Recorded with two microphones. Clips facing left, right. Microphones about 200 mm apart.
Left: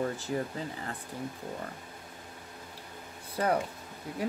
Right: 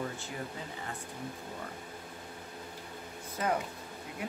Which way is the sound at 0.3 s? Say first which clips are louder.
Left 8 dB; 40° left (ahead or behind).